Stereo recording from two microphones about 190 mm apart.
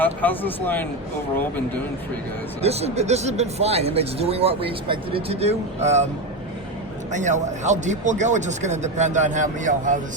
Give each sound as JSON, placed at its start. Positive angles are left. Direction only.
{"t": 0.0, "sound": "speech", "side_deg": 10}
{"t": 2.6, "sound": "speech", "side_deg": -35}
{"t": 7.1, "sound": "speech", "side_deg": -40}